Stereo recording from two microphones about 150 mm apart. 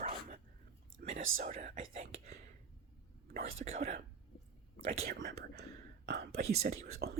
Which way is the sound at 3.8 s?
70° right (ahead or behind).